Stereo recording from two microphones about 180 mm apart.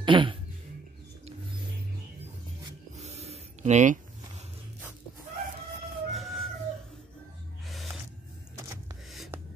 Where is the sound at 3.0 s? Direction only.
35° right (ahead or behind).